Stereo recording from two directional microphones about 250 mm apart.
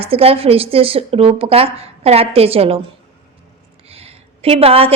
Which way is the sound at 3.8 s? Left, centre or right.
Right.